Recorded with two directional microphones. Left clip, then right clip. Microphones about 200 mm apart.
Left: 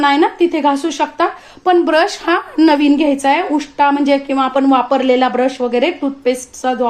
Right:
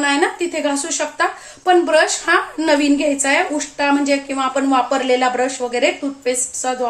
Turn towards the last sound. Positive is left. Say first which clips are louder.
# left 4 dB
turn(degrees=35)  # may be behind; listen again after turning